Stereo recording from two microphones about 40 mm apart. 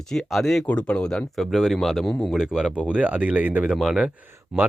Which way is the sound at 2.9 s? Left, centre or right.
Right.